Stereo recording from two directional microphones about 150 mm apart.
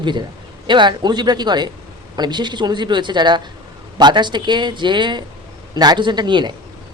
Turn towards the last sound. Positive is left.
turn(degrees=-30)  # may be behind; listen again after turning